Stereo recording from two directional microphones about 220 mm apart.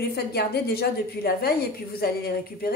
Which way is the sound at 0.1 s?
45° left (ahead or behind).